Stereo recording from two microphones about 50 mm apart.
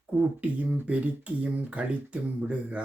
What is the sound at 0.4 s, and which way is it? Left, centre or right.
Speech, right.